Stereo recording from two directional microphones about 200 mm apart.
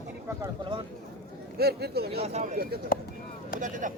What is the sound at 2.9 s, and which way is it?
Speech, 45° left (ahead or behind).